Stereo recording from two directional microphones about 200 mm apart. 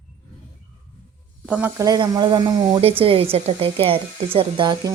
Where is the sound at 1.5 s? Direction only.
10° right (ahead or behind).